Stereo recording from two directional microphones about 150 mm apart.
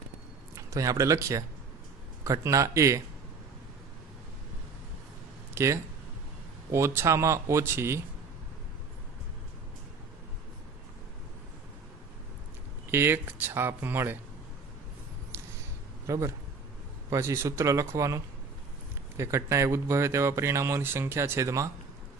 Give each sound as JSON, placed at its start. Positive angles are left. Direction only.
{"t": 0.6, "sound": "speech", "side_deg": -20}
{"t": 5.5, "sound": "a sound", "side_deg": -20}
{"t": 6.7, "sound": "speech", "side_deg": -20}
{"t": 12.9, "sound": "speech", "side_deg": -15}
{"t": 15.3, "sound": "a sound", "side_deg": -15}
{"t": 16.1, "sound": "speech", "side_deg": -20}